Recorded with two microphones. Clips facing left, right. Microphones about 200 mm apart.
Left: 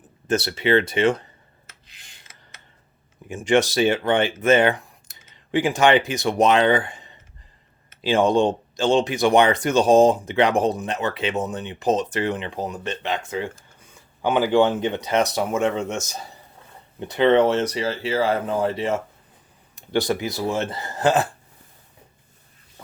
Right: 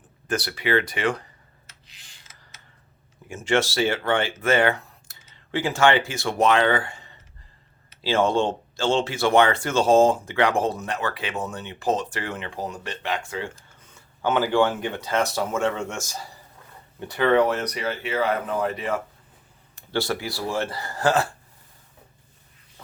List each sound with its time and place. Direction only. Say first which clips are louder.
0.3 s speech: left 5 dB; 25° left (ahead or behind)
1.6 s a sound: left 2 dB; 55° left (ahead or behind)
3.2 s speech: left 4 dB; 15° left (ahead or behind)